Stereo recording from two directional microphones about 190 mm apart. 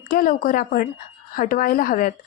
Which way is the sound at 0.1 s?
45° left (ahead or behind).